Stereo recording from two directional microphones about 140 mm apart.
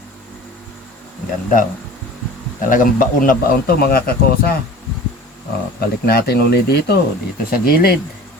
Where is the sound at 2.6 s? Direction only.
75° left (ahead or behind).